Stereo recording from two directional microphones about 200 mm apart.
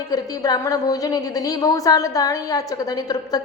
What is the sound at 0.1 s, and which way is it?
A woman's voice, 20° left (ahead or behind).